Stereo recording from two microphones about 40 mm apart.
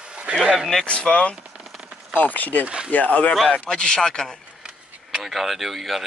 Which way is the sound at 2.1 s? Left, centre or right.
Left.